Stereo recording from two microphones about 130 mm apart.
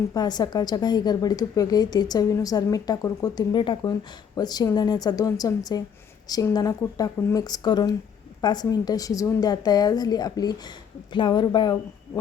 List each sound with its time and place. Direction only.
0.1 s a woman's voice: 30° left (ahead or behind)